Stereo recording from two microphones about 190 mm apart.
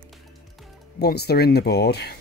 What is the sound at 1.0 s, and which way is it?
Speech, 55° left (ahead or behind).